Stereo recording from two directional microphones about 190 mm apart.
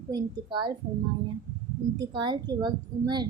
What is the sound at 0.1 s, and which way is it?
Speech, 25° right (ahead or behind).